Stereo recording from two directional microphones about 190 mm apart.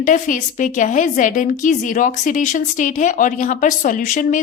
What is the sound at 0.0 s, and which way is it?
A woman's voice, 40° left (ahead or behind).